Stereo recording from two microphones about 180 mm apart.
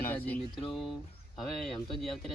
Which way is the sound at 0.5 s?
25° left (ahead or behind).